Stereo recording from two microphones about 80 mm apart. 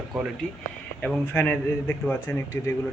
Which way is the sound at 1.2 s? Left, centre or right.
Left.